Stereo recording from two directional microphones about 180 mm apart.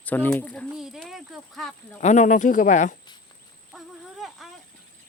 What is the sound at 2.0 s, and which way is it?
Speech, 40° left (ahead or behind).